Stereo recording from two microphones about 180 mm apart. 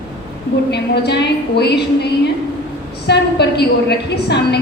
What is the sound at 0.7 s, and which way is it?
A woman's voice, 65° left (ahead or behind).